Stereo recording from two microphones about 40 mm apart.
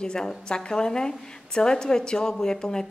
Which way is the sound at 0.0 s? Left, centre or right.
Centre.